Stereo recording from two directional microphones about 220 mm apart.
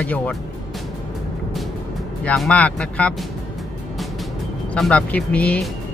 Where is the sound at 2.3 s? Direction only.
5° left (ahead or behind).